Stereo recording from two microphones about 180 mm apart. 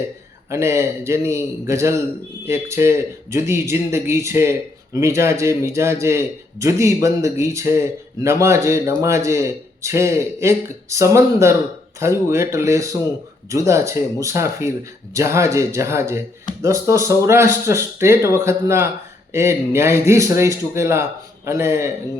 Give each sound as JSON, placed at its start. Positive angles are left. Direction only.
{"t": 0.5, "sound": "a man's voice", "side_deg": -15}